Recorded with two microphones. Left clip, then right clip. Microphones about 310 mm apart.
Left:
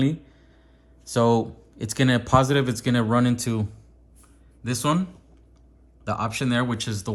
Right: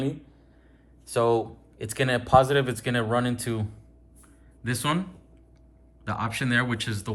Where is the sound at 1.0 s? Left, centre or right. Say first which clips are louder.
Left 2 dB; left.